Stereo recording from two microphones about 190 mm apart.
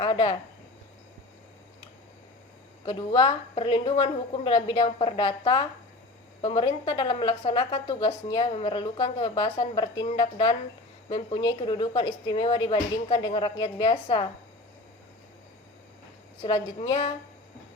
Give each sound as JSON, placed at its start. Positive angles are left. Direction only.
{"t": 0.0, "sound": "a woman's voice", "side_deg": 25}
{"t": 2.8, "sound": "a woman's voice", "side_deg": 25}
{"t": 16.4, "sound": "a woman's voice", "side_deg": 25}